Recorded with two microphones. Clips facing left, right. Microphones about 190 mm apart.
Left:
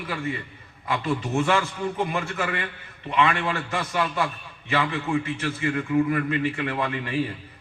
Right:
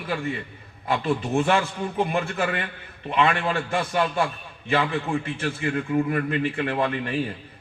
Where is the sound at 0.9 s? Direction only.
35° right (ahead or behind).